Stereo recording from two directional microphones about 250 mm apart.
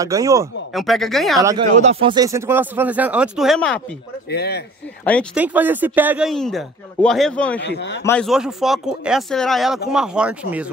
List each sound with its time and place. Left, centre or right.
0.0 s speech: centre
0.7 s speech: centre
1.4 s speech: centre
1.8 s speech: right; by 3.8 s centre
4.3 s speech: left
5.0 s speech: centre
5.4 s speech: centre
7.6 s speech: left
8.0 s speech: centre